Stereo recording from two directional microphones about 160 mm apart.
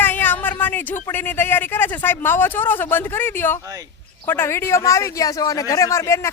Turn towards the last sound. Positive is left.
turn(degrees=15)  # may be behind; listen again after turning